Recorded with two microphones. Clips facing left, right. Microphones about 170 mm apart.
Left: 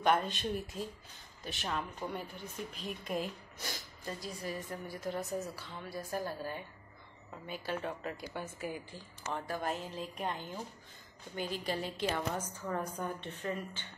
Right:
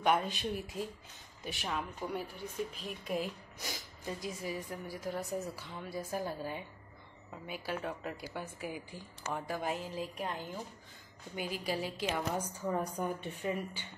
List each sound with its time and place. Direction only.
0.0 s a woman's voice: 5° right (ahead or behind)
5.6 s a woman's voice: 15° right (ahead or behind)